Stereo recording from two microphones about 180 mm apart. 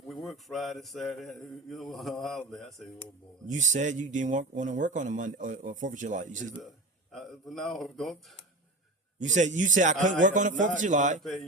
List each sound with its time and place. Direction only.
0.1 s mantra: centre (ahead or behind)
3.4 s speech: 40° right (ahead or behind)
7.1 s mantra: centre (ahead or behind)
9.1 s speech: 40° right (ahead or behind)
11.2 s mantra: centre (ahead or behind)